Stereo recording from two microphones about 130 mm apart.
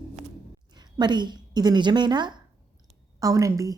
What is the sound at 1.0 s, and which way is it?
A woman's voice, 35° right (ahead or behind).